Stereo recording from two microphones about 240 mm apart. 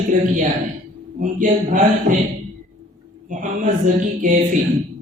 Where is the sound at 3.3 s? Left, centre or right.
Right.